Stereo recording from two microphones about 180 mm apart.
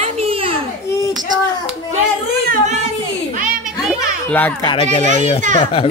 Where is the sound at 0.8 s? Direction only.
20° left (ahead or behind).